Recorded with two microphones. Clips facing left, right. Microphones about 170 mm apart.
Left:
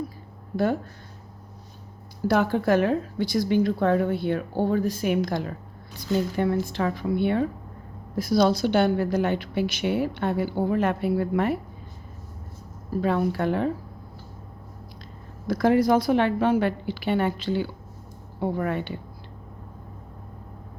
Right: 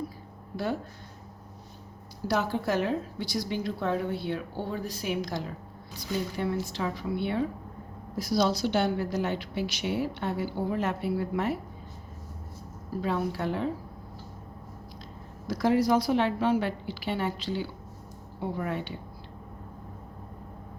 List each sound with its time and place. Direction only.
0.5 s speech: 50° left (ahead or behind)
2.2 s a woman's voice: 55° left (ahead or behind)
13.0 s a woman's voice: 55° left (ahead or behind)
15.4 s a woman's voice: 55° left (ahead or behind)